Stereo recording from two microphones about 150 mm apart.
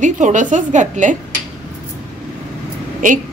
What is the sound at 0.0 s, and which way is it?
A woman's voice, 55° right (ahead or behind).